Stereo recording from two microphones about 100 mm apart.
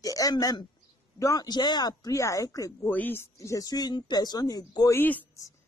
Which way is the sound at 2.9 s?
20° left (ahead or behind).